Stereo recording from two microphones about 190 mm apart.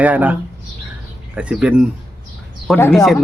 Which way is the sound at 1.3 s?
5° right (ahead or behind).